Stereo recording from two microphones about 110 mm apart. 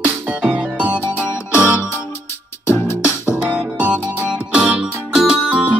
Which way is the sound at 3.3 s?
15° right (ahead or behind).